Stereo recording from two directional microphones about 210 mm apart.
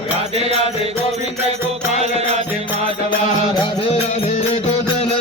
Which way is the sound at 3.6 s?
25° left (ahead or behind).